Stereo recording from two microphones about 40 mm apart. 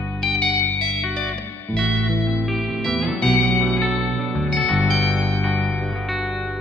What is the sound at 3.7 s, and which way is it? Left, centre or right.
Music, centre.